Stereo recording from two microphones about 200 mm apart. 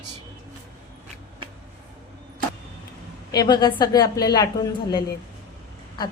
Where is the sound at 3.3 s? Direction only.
20° left (ahead or behind).